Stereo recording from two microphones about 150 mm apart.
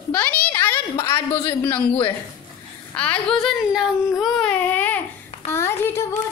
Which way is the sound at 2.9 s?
10° left (ahead or behind).